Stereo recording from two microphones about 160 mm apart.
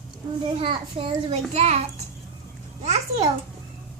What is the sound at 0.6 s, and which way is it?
A child's voice, 30° right (ahead or behind).